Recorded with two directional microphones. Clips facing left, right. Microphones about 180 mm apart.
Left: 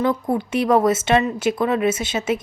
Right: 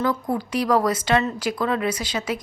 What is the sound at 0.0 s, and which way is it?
Speech, 25° left (ahead or behind).